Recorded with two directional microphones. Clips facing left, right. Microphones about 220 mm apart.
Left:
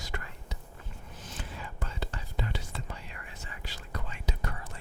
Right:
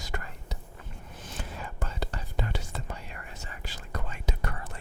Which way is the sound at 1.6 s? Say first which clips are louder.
Right 4 dB; 45° right (ahead or behind).